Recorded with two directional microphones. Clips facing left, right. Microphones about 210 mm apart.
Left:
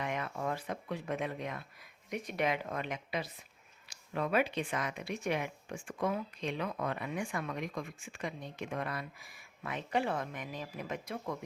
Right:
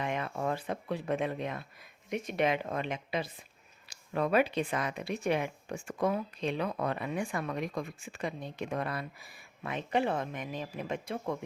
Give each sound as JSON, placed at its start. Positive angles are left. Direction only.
{"t": 0.0, "sound": "a sound", "side_deg": -25}
{"t": 0.4, "sound": "speech", "side_deg": -30}
{"t": 4.1, "sound": "speech", "side_deg": -40}
{"t": 9.6, "sound": "speech", "side_deg": -25}